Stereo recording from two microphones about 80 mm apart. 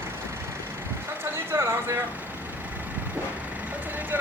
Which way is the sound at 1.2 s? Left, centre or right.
Right.